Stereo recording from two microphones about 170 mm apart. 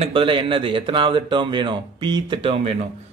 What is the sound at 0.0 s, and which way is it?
Speech, 30° right (ahead or behind).